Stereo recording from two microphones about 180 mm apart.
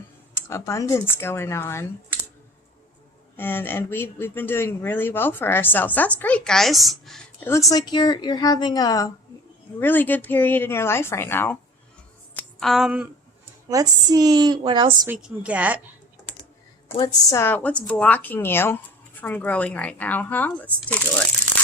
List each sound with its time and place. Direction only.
0.3 s speech: 15° left (ahead or behind)
3.3 s speech: 10° left (ahead or behind)
7.4 s a woman's voice: 15° left (ahead or behind)
12.3 s a sound: 5° left (ahead or behind)
13.7 s a woman's voice: 20° right (ahead or behind)
15.0 s a woman's voice: 10° right (ahead or behind)
17.3 s speech: 10° left (ahead or behind)